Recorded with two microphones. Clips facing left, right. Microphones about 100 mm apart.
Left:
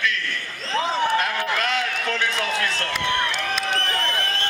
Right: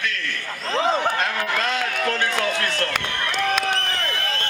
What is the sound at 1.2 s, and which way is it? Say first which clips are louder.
Speech: even; 25° right (ahead or behind).